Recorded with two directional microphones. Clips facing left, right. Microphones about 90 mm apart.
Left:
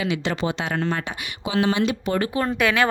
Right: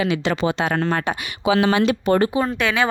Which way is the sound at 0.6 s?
55° right (ahead or behind).